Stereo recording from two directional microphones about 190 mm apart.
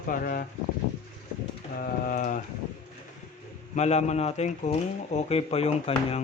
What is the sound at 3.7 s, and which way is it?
Speech, 35° left (ahead or behind).